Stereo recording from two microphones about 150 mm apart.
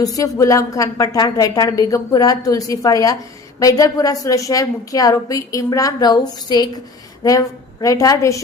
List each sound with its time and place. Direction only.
0.0 s a woman's voice: 25° left (ahead or behind)